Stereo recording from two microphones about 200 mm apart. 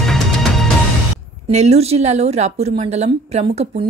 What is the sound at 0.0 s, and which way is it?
Music, centre (ahead or behind).